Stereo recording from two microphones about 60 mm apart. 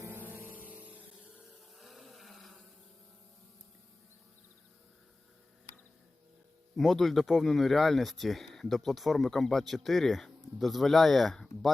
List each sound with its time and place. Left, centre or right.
0.1 s music: right
1.7 s a sound: centre
6.7 s speech: centre